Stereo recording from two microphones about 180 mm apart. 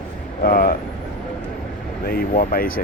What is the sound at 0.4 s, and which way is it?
Vehicle, 55° left (ahead or behind).